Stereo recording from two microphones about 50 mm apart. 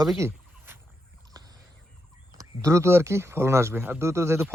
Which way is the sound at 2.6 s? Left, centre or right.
Right.